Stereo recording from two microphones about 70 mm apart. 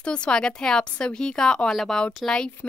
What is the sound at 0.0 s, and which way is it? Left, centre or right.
A woman's voice, centre.